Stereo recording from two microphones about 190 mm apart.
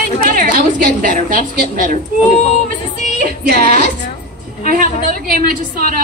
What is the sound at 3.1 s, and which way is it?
Music, 50° right (ahead or behind).